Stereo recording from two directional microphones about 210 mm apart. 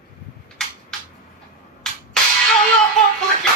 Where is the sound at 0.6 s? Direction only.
Centre (ahead or behind).